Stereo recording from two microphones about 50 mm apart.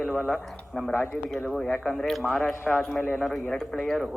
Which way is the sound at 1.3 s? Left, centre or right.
Centre.